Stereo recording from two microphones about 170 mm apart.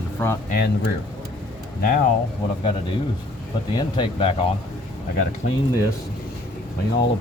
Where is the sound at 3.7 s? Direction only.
30° left (ahead or behind).